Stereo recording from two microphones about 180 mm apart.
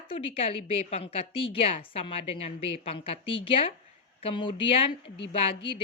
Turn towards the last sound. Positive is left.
turn(degrees=30)  # may be behind; listen again after turning